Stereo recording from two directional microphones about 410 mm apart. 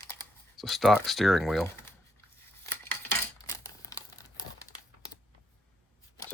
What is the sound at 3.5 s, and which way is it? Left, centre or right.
Crumpling, centre.